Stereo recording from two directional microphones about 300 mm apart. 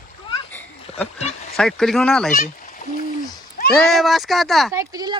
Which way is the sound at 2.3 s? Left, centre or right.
Left.